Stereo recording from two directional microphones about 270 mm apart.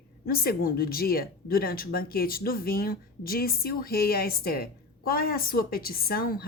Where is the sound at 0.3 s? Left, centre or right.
Left.